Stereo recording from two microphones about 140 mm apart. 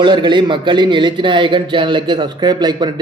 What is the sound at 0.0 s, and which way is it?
Speech, 35° right (ahead or behind).